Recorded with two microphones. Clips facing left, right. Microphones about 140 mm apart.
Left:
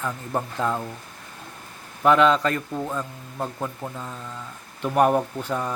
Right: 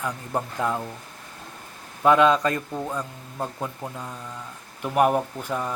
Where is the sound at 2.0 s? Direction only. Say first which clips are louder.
Even; 20° right (ahead or behind).